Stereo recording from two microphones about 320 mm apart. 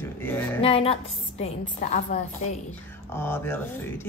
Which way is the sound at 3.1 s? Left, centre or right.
Centre.